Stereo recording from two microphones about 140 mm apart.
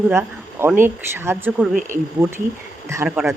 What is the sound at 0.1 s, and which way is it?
Speech, 15° right (ahead or behind).